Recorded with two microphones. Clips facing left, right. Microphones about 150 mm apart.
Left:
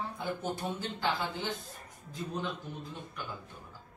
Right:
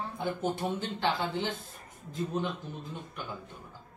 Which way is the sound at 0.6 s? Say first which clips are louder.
Right 4 dB; 15° right (ahead or behind).